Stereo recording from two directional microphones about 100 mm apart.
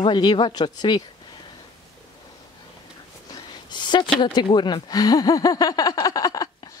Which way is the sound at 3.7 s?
50° left (ahead or behind).